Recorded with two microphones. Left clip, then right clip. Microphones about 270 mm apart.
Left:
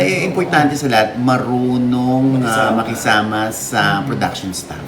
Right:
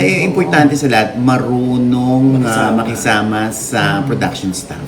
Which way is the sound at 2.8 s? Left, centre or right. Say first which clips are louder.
Right 1 dB; centre.